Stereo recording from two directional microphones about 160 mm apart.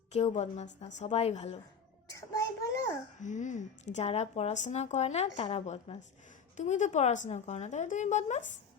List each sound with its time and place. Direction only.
0.1 s speech: 45° left (ahead or behind)
2.0 s child singing: 20° left (ahead or behind)
3.2 s speech: 50° left (ahead or behind)